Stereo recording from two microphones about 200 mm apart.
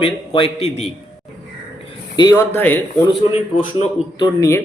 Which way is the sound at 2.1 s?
20° left (ahead or behind).